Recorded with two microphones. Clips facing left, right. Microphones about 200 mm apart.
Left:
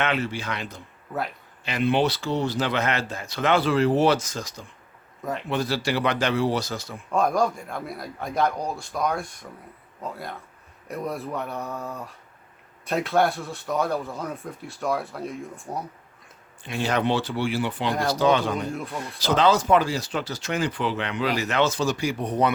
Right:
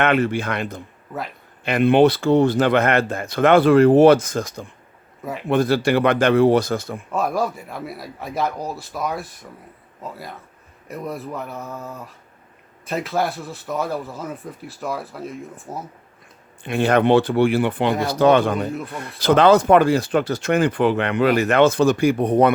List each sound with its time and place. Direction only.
0.0 s speech: 55° right (ahead or behind)
7.1 s speech: 5° right (ahead or behind)
16.6 s speech: 55° right (ahead or behind)
18.7 s speech: centre (ahead or behind)
18.9 s speech: 55° right (ahead or behind)